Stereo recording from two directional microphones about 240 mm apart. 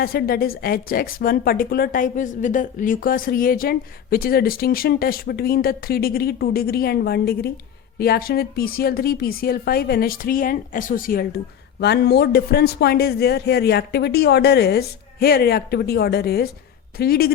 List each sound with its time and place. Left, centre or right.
0.0 s a woman's voice: left